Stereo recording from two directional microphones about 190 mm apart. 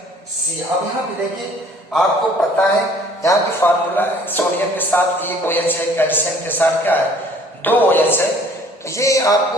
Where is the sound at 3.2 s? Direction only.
10° left (ahead or behind).